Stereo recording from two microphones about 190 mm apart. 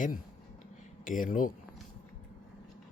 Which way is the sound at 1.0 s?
45° left (ahead or behind).